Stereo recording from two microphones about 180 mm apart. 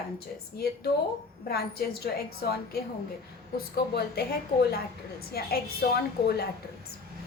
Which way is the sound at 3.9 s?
60° left (ahead or behind).